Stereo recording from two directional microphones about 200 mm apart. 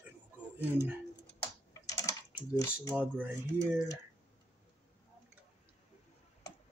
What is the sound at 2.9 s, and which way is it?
Speech, 5° right (ahead or behind).